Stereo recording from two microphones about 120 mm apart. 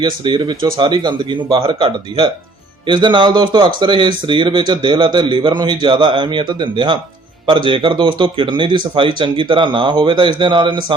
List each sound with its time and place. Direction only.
0.0 s speech: 40° right (ahead or behind)